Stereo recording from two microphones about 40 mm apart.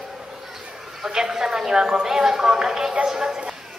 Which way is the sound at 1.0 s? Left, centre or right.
Centre.